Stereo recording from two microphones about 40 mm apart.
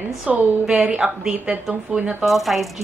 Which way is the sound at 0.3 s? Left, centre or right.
Centre.